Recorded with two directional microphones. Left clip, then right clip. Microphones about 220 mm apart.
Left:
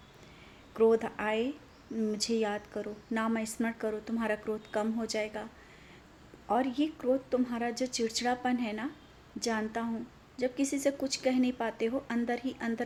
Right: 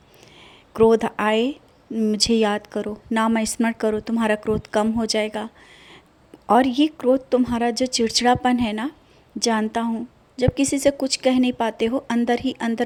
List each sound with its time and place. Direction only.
0.7 s a woman's voice: 40° right (ahead or behind)
6.5 s a woman's voice: 45° right (ahead or behind)